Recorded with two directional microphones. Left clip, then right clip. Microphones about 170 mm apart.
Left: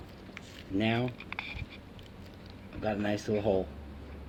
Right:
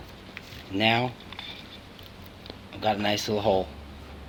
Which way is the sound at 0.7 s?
10° left (ahead or behind).